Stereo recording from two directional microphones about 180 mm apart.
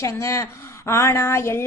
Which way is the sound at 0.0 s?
15° left (ahead or behind).